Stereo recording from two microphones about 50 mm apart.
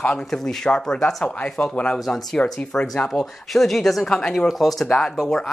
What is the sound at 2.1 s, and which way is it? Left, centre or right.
Speech, centre.